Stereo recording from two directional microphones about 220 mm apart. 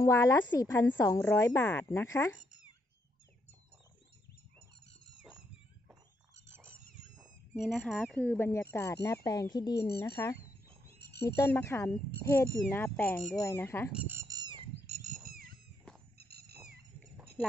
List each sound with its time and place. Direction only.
0.0 s a woman's voice: 15° left (ahead or behind)
7.2 s a woman's voice: centre (ahead or behind); by 9.8 s 20° left (ahead or behind)
9.8 s speech: 45° left (ahead or behind)
10.1 s a woman's voice: 15° left (ahead or behind)
10.9 s a sound: 45° left (ahead or behind)
11.2 s a woman's voice: 15° left (ahead or behind)
13.9 s bird: 10° right (ahead or behind); by 15.1 s 30° right (ahead or behind)
15.2 s cat: 40° right (ahead or behind)